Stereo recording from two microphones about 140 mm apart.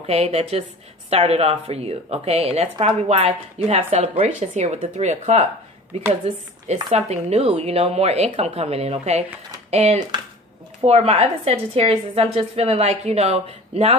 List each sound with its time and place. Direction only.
0.0 s a woman's voice: 50° right (ahead or behind)